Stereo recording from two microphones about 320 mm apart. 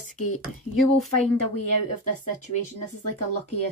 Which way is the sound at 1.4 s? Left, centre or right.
Left.